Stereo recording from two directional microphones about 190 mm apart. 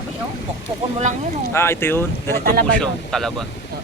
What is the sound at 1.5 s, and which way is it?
Speech, 15° left (ahead or behind).